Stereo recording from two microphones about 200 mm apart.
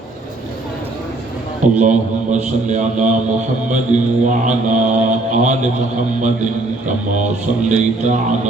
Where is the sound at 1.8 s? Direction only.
35° right (ahead or behind).